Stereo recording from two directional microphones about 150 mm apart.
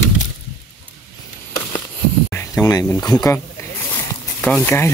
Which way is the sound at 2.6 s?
20° left (ahead or behind).